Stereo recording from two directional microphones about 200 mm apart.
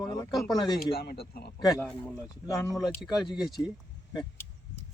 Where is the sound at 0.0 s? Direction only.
20° left (ahead or behind).